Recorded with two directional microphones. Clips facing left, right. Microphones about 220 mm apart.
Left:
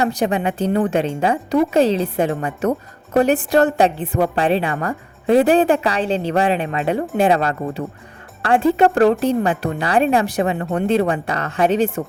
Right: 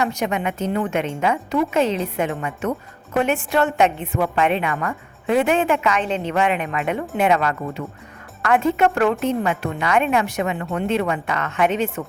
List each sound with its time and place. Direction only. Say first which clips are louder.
0.0 s speech: left 4 dB; 35° left (ahead or behind)